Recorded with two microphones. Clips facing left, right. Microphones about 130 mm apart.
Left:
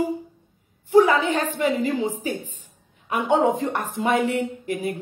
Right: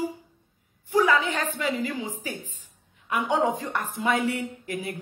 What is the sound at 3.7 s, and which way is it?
Speech, 25° left (ahead or behind).